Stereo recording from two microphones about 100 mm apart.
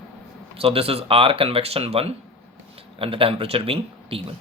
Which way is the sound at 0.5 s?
75° right (ahead or behind).